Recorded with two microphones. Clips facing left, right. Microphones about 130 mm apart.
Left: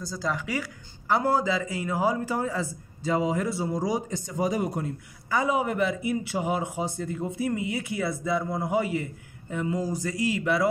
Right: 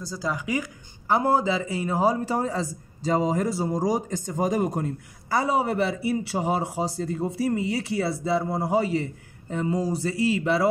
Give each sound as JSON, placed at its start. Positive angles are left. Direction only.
{"t": 0.0, "sound": "speech", "side_deg": -5}